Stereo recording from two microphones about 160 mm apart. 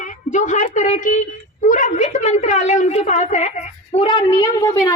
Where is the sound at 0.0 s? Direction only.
50° left (ahead or behind).